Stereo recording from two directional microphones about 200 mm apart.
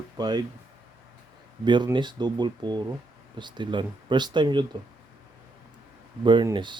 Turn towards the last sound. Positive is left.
turn(degrees=-25)  # may be behind; listen again after turning